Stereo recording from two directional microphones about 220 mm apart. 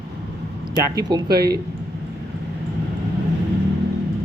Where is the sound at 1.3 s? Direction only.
45° right (ahead or behind).